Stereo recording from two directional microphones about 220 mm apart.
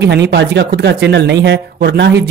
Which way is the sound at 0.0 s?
50° right (ahead or behind).